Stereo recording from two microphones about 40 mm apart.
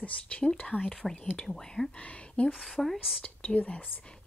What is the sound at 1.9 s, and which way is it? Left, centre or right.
Speech, left.